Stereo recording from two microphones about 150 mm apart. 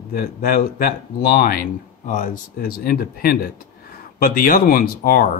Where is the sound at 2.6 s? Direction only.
90° left.